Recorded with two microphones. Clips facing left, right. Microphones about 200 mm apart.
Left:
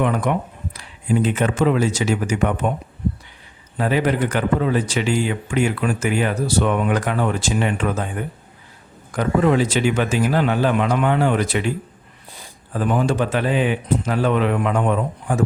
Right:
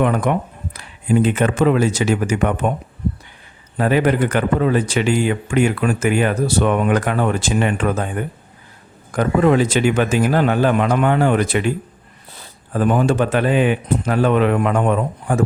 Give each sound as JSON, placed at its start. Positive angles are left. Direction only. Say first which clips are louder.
{"t": 0.0, "sound": "speech", "louder": "right 3 dB", "side_deg": -55}
{"t": 3.8, "sound": "speech", "louder": "right 3 dB", "side_deg": -55}
{"t": 9.1, "sound": "speech", "louder": "right 2 dB", "side_deg": -55}
{"t": 12.7, "sound": "speech", "louder": "right 3 dB", "side_deg": -50}